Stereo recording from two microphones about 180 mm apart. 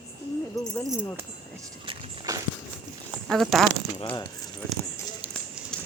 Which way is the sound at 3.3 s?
Centre (ahead or behind).